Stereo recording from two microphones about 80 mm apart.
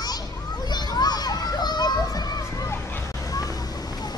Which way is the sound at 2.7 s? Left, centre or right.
Left.